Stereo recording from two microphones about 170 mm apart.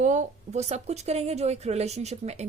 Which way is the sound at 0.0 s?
45° right (ahead or behind).